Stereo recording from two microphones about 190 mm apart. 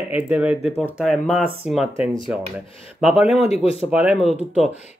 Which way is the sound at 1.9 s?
15° right (ahead or behind).